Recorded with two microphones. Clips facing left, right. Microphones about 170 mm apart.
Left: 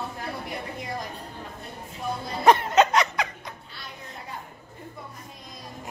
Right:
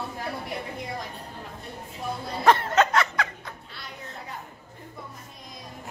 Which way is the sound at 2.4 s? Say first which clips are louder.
Left 2 dB; 15° left (ahead or behind).